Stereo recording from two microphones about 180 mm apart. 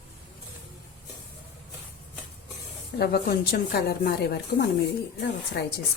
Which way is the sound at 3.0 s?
60° left (ahead or behind).